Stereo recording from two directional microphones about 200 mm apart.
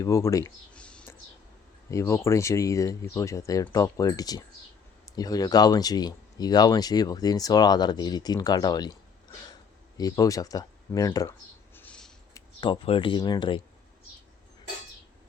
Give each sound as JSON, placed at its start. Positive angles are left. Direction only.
{"t": 0.0, "sound": "speech", "side_deg": 15}
{"t": 0.7, "sound": "whispering", "side_deg": 5}
{"t": 1.9, "sound": "speech", "side_deg": 15}
{"t": 10.0, "sound": "speech", "side_deg": 15}
{"t": 12.3, "sound": "speech", "side_deg": 25}